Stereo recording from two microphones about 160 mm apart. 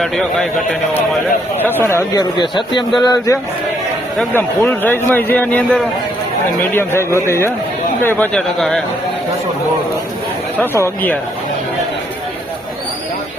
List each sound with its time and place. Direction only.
0.0 s a man's voice: centre (ahead or behind)
1.6 s a man's voice: 15° left (ahead or behind)
2.4 s a man's voice: 30° left (ahead or behind); by 8.8 s centre (ahead or behind)
10.6 s a man's voice: 15° left (ahead or behind)